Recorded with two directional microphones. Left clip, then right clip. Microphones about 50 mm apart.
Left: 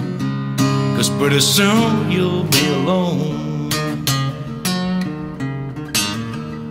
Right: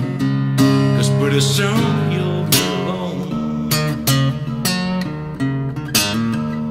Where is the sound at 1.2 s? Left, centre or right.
Centre.